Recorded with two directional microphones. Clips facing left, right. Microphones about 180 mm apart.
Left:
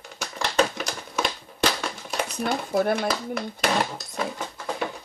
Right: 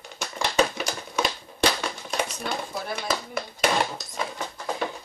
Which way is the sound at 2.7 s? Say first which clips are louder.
Left 10 dB; 55° left (ahead or behind).